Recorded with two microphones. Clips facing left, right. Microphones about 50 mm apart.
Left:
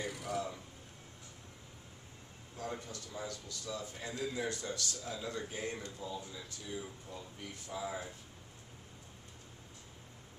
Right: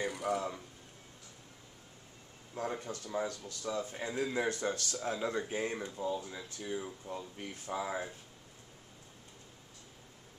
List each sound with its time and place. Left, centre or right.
0.3 s speech: centre
2.5 s a man's voice: right